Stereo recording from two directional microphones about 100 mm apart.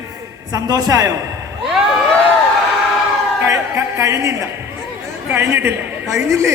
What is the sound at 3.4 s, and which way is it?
A man's voice, 30° right (ahead or behind).